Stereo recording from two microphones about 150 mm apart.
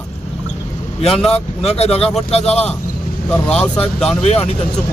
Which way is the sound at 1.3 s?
45° left (ahead or behind).